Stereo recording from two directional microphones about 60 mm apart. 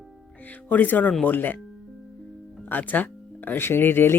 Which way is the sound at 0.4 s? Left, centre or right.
Left.